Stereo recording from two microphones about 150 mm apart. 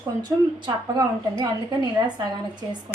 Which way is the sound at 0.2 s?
25° right (ahead or behind).